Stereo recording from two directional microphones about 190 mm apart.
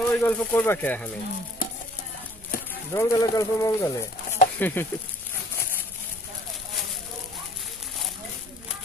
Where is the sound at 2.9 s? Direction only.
15° left (ahead or behind).